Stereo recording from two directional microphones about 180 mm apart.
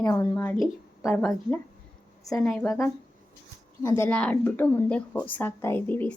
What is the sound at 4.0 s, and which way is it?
A woman's voice, 5° left (ahead or behind).